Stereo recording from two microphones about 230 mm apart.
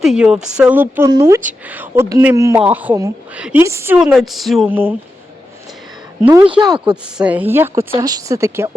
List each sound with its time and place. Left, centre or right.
0.0 s speech: centre
6.4 s speech: right
6.9 s speech: centre